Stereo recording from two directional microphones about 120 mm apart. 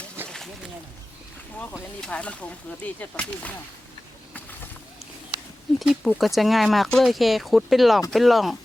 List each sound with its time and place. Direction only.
0.2 s a sound: 20° right (ahead or behind)
2.0 s speech: 10° left (ahead or behind)
5.8 s speech: 5° right (ahead or behind)